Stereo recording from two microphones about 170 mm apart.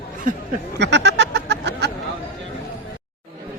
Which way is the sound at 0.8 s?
90° right.